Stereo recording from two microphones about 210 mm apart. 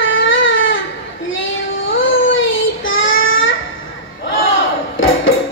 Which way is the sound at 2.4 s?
70° left (ahead or behind).